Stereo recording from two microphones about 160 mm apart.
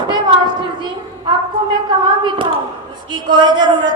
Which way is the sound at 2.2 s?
30° right (ahead or behind).